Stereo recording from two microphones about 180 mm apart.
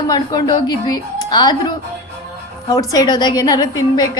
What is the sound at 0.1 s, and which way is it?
A woman's voice, 20° left (ahead or behind).